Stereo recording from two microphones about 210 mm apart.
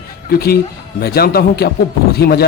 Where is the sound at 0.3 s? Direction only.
50° left (ahead or behind).